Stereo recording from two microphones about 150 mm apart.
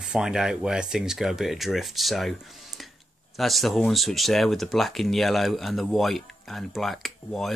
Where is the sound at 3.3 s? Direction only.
Centre (ahead or behind).